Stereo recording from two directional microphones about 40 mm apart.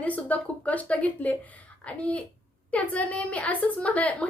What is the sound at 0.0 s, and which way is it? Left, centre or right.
Speech, left.